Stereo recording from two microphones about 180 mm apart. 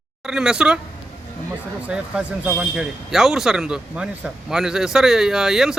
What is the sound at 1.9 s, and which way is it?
Speech, 5° right (ahead or behind).